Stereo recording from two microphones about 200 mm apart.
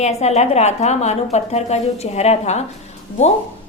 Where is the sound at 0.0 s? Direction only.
35° left (ahead or behind).